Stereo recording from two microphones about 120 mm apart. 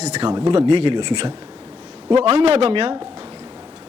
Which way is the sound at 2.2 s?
60° right (ahead or behind).